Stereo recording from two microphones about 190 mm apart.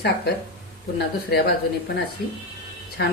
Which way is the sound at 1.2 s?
55° left (ahead or behind).